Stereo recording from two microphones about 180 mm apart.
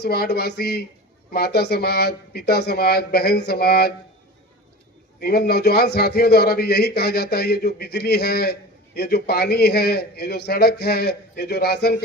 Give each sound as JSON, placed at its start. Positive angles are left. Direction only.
{"t": 0.0, "sound": "a man's voice", "side_deg": 65}
{"t": 5.2, "sound": "a man's voice", "side_deg": 60}